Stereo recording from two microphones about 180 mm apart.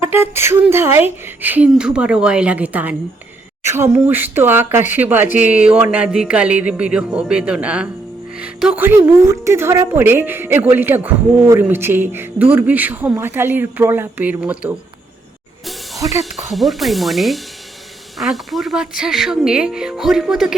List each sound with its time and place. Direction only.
0.1 s a woman's voice: 15° right (ahead or behind)
8.4 s music: 5° right (ahead or behind)
9.0 s a woman's voice: 15° right (ahead or behind)
16.0 s speech: 20° right (ahead or behind)
16.3 s speech: centre (ahead or behind)